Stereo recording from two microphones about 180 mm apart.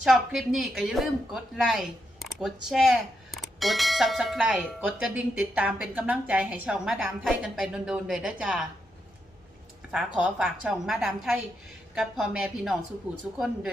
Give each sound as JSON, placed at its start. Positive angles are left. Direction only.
{"t": 0.0, "sound": "speech", "side_deg": 0}
{"t": 9.9, "sound": "speech", "side_deg": -5}